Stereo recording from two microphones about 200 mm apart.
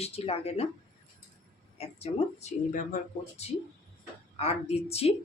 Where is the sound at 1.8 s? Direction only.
30° left (ahead or behind).